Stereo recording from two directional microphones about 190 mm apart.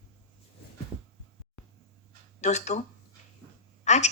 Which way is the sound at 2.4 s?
35° left (ahead or behind).